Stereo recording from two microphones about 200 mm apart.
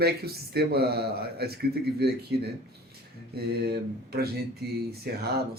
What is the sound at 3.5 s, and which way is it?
A man's voice, 55° right (ahead or behind).